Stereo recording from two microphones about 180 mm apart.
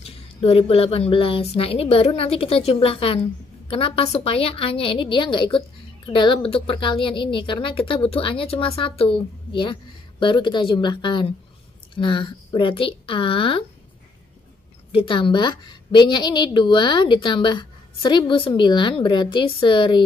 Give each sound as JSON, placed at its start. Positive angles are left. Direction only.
{"t": 0.0, "sound": "a woman's voice", "side_deg": 30}
{"t": 14.9, "sound": "a woman's voice", "side_deg": 30}